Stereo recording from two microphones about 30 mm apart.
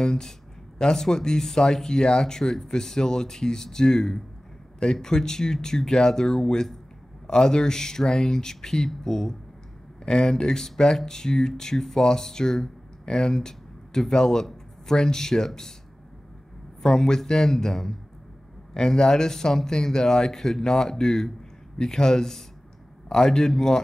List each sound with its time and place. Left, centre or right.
0.0 s speech: left
16.8 s speech: left
18.9 s a man's voice: left